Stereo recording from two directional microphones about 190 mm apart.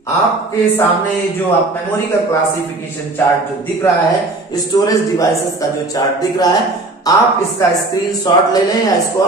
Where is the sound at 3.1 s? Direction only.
10° left (ahead or behind).